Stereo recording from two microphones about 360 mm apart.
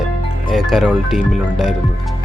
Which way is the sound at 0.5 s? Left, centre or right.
Centre.